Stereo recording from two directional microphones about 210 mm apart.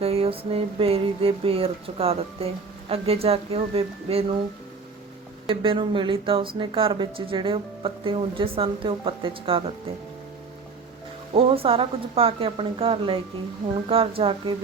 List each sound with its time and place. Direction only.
0.0 s speech: 30° right (ahead or behind)
5.5 s speech: 25° right (ahead or behind)
11.3 s speech: 25° right (ahead or behind)